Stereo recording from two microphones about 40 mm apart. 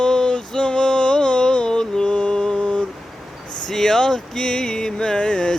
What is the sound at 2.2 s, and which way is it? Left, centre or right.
Mantra, left.